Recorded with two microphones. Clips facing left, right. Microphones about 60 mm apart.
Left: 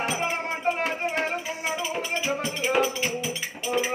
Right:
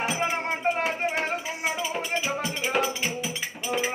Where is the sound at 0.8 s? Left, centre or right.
Centre.